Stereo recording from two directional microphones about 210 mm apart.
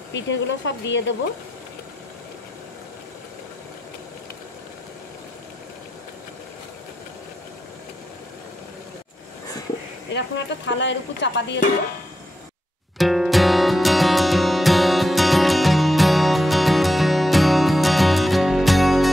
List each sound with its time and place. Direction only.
0.1 s speech: 60° left (ahead or behind)
10.1 s speech: 60° left (ahead or behind)
12.9 s music: centre (ahead or behind)